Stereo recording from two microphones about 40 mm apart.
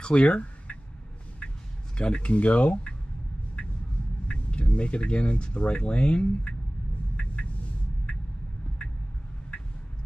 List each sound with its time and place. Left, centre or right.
0.1 s a sound: left
2.0 s speech: left
4.3 s speech: left